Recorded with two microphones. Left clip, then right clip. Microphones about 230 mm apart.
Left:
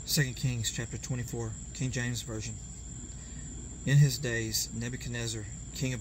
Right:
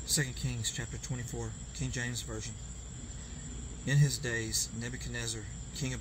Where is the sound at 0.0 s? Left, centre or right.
Left.